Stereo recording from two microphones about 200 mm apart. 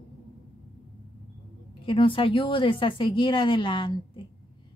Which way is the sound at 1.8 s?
25° left (ahead or behind).